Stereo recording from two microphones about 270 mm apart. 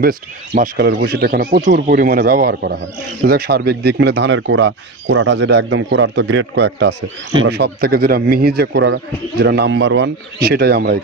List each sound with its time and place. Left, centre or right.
0.0 s speech: right